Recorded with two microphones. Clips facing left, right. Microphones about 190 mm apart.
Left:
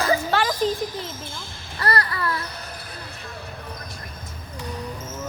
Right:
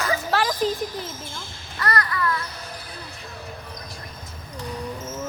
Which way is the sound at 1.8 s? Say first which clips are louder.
Even; 30° left (ahead or behind).